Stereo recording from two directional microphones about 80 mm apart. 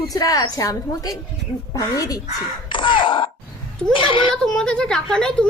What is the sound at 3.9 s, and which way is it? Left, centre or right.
Speech, left.